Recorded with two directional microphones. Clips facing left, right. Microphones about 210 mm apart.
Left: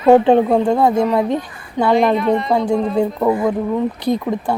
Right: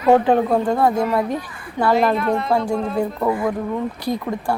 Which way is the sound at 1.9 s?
Centre (ahead or behind).